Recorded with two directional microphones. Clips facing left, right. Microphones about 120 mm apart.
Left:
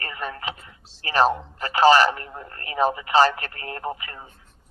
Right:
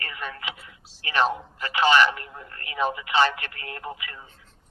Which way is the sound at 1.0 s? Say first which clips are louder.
Left 4 dB; 40° left (ahead or behind).